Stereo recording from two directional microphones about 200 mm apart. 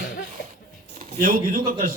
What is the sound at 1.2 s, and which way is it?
Speech, 45° right (ahead or behind).